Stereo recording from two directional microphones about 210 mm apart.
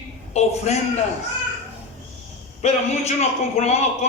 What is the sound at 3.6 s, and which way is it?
Speech, 30° left (ahead or behind).